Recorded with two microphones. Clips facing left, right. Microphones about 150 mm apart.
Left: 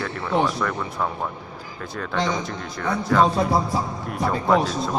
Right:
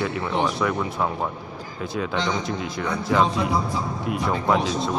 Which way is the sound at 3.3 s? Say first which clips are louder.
Left 3 dB; 40° left (ahead or behind).